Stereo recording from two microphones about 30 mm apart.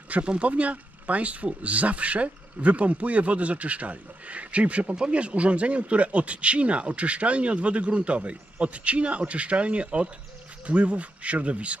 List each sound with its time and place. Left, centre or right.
0.3 s speech: right